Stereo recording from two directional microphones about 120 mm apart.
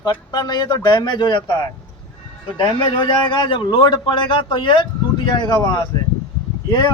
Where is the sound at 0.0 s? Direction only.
35° left (ahead or behind).